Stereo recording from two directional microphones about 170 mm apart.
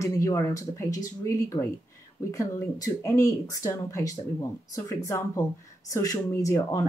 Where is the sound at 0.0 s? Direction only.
20° left (ahead or behind).